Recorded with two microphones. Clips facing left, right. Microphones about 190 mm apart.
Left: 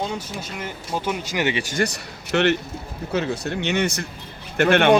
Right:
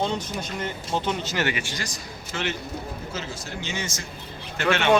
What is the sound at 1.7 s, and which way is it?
A man's voice, 65° left (ahead or behind).